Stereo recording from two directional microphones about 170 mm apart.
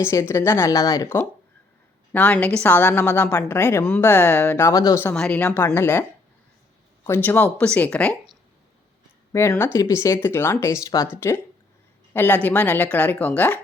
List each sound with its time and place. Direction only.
0.0 s a woman's voice: 15° left (ahead or behind)
5.1 s a woman's voice: 5° left (ahead or behind)
9.3 s a woman's voice: 15° left (ahead or behind)